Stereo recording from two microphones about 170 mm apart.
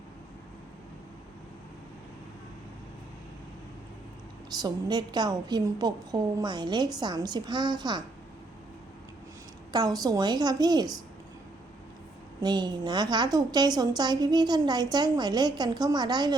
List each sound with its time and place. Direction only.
4.5 s a woman's voice: 25° right (ahead or behind)
9.7 s a woman's voice: 20° right (ahead or behind)
12.4 s a woman's voice: 25° right (ahead or behind)